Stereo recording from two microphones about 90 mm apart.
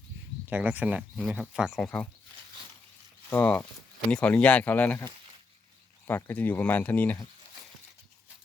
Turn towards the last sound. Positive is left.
turn(degrees=20)  # may be behind; listen again after turning